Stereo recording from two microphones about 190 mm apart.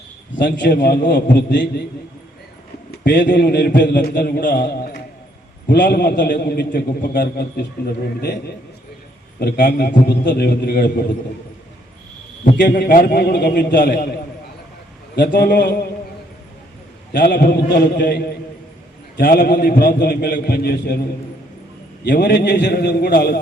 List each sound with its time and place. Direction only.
0.3 s a man's voice: 65° left (ahead or behind)
3.0 s a man's voice: 65° left (ahead or behind)
9.4 s a man's voice: 55° left (ahead or behind)
12.7 s a man's voice: 45° left (ahead or behind); by 13.8 s 65° left (ahead or behind)
13.8 s a man's voice: 45° left (ahead or behind)
15.1 s a man's voice: 60° left (ahead or behind)
17.1 s a man's voice: 50° left (ahead or behind)
22.0 s a man's voice: 55° left (ahead or behind)